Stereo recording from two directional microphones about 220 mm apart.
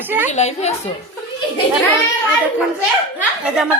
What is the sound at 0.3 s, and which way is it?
Speech, 30° left (ahead or behind).